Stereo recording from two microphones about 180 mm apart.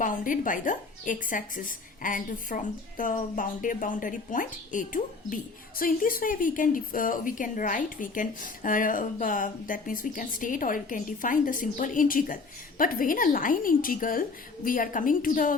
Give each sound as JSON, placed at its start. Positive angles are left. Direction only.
{"t": 0.0, "sound": "a woman's voice", "side_deg": 45}